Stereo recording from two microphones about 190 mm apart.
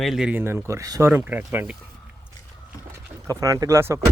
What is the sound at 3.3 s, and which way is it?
Speech, 20° right (ahead or behind).